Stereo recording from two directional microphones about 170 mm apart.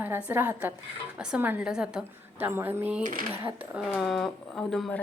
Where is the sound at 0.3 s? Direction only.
15° right (ahead or behind).